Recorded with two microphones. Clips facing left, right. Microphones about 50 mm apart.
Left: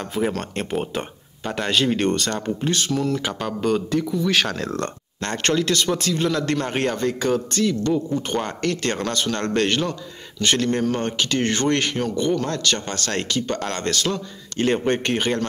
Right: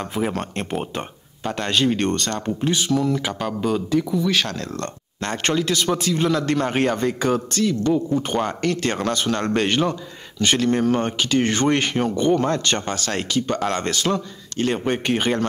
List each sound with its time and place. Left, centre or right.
0.0 s speech: centre
5.2 s speech: centre
12.8 s speech: centre
14.6 s speech: centre